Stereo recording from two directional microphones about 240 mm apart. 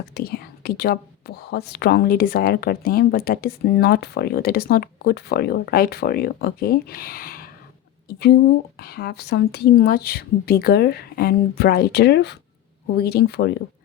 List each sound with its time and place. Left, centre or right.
0.1 s speech: left
8.8 s speech: left